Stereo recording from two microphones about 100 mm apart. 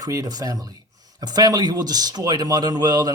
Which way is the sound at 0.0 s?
35° right (ahead or behind).